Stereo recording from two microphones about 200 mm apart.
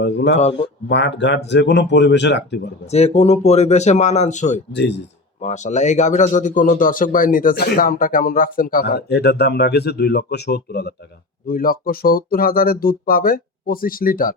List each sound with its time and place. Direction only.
0.0 s a sound: 55° left (ahead or behind)
0.9 s speech: 60° left (ahead or behind)
2.8 s speech: 30° left (ahead or behind)
4.7 s speech: 60° left (ahead or behind)
5.4 s a man's voice: 35° left (ahead or behind)